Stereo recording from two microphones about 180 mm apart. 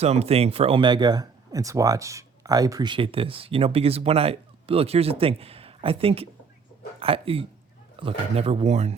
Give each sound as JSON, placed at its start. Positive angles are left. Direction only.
{"t": 0.0, "sound": "speech", "side_deg": -35}